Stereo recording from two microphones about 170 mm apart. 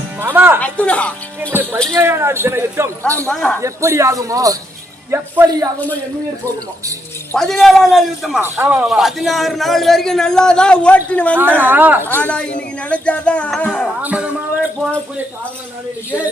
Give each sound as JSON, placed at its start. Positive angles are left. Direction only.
{"t": 0.2, "sound": "speech", "side_deg": -10}
{"t": 0.6, "sound": "speech", "side_deg": 5}
{"t": 1.9, "sound": "speech", "side_deg": -15}
{"t": 3.2, "sound": "speech", "side_deg": 5}
{"t": 3.6, "sound": "a man's voice", "side_deg": -15}
{"t": 7.3, "sound": "a man's voice", "side_deg": 0}
{"t": 8.4, "sound": "a man's voice", "side_deg": -10}
{"t": 11.3, "sound": "speech", "side_deg": -10}
{"t": 12.0, "sound": "speech", "side_deg": 10}
{"t": 14.0, "sound": "speech", "side_deg": -10}